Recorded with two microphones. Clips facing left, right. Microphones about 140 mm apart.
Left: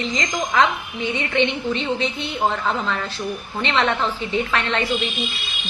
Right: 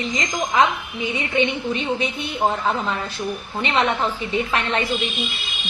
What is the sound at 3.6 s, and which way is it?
Speech, 15° right (ahead or behind).